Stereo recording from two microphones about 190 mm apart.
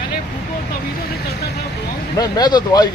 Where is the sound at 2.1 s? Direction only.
20° left (ahead or behind).